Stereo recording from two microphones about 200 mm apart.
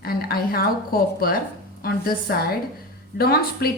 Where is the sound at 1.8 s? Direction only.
50° left (ahead or behind).